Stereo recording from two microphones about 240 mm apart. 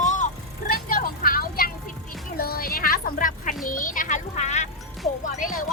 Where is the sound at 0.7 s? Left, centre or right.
Left.